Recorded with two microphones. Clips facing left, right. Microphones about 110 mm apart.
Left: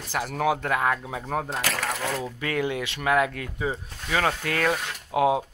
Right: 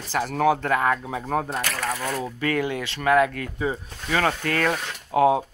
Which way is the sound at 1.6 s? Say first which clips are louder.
Even; 90° left.